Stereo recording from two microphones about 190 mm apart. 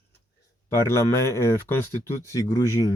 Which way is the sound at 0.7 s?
15° left (ahead or behind).